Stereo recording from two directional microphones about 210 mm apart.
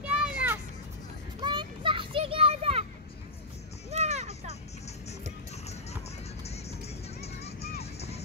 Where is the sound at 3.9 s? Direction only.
30° right (ahead or behind).